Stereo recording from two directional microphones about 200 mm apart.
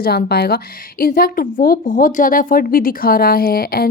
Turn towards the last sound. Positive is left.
turn(degrees=50)  # may be behind; listen again after turning